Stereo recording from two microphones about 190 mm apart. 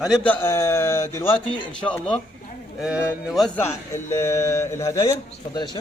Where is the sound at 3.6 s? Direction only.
15° left (ahead or behind).